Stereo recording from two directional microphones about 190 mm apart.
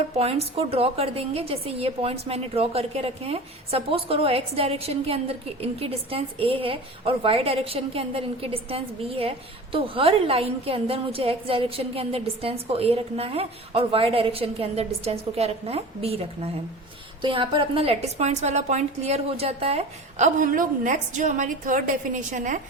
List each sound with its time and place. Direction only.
0.2 s a woman's voice: 30° right (ahead or behind)